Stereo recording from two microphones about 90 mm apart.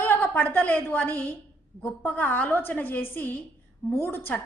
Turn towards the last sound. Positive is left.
turn(degrees=25)  # may be behind; listen again after turning